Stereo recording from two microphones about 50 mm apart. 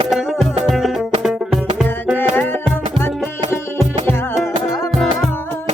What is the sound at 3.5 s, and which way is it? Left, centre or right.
Music, left.